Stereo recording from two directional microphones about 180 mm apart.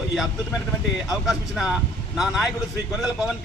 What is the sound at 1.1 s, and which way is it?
A man's voice, centre (ahead or behind).